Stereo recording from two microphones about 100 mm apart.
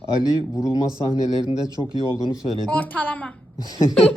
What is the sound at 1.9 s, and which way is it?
Speech, 45° right (ahead or behind).